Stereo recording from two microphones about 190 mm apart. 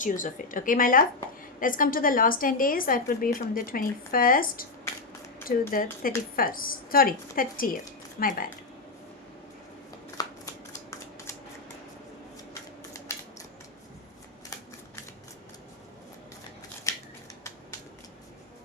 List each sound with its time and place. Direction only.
0.0 s a woman's voice: 45° left (ahead or behind)
10.2 s shuffling cards: 20° left (ahead or behind)
16.9 s scissors: 15° left (ahead or behind)